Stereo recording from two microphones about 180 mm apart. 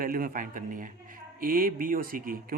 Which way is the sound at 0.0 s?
50° right (ahead or behind).